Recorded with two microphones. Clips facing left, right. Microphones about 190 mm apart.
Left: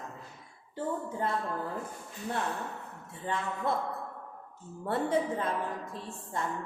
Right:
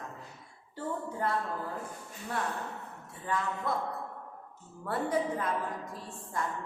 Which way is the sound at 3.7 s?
25° left (ahead or behind).